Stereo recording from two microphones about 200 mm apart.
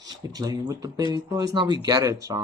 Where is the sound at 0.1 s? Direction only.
20° right (ahead or behind).